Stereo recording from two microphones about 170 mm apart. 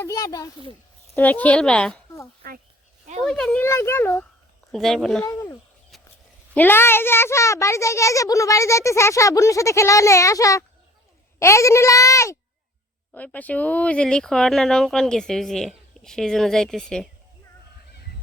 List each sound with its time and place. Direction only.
0.0 s speech: 20° left (ahead or behind)
1.1 s a child's voice: 10° left (ahead or behind)
2.4 s speech: 65° right (ahead or behind)
3.2 s a child's voice: 5° left (ahead or behind)
5.3 s a child's voice: 20° left (ahead or behind); by 17.1 s 5° left (ahead or behind)